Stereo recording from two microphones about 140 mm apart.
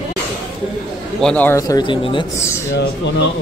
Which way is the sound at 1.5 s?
25° left (ahead or behind).